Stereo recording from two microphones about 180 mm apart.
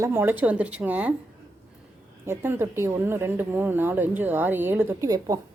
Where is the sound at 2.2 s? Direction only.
15° right (ahead or behind).